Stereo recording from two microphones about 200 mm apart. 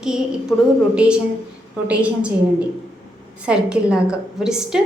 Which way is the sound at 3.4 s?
5° right (ahead or behind).